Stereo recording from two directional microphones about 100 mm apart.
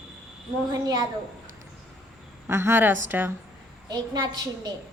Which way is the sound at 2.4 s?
25° right (ahead or behind).